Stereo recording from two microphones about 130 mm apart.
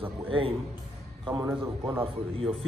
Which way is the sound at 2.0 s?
45° right (ahead or behind).